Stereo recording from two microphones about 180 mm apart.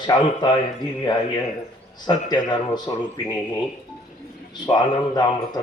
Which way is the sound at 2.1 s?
25° left (ahead or behind).